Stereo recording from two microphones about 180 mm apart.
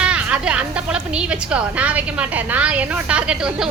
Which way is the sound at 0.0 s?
5° right (ahead or behind).